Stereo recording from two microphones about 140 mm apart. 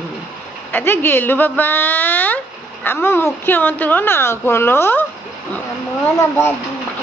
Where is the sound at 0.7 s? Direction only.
15° left (ahead or behind).